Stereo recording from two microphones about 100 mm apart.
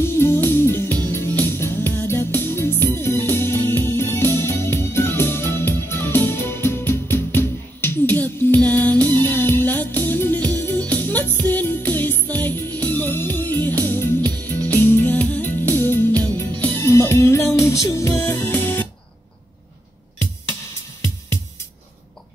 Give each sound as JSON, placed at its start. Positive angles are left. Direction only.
{"t": 0.0, "sound": "music", "side_deg": 25}